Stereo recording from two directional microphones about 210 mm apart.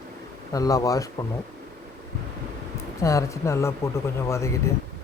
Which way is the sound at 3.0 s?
15° left (ahead or behind).